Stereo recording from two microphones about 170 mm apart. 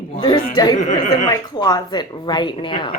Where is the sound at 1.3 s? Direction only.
20° left (ahead or behind).